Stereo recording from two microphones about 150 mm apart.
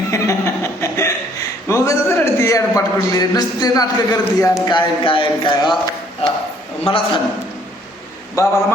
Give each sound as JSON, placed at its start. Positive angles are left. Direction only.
{"t": 0.1, "sound": "speech", "side_deg": 20}
{"t": 6.8, "sound": "speech", "side_deg": 35}
{"t": 8.4, "sound": "a man's voice", "side_deg": 20}